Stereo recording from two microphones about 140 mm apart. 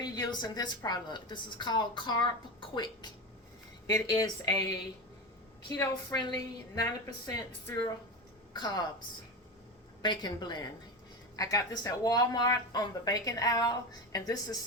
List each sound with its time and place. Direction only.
0.0 s a woman's voice: 30° left (ahead or behind)
5.6 s speech: 25° left (ahead or behind)
10.0 s speech: 30° left (ahead or behind)